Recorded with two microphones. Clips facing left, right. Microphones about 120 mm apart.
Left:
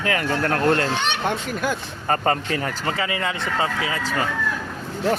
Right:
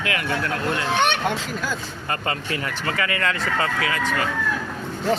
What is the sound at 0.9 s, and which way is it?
Speech, 55° right (ahead or behind).